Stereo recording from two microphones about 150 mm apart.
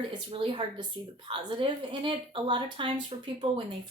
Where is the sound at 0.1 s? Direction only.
30° right (ahead or behind).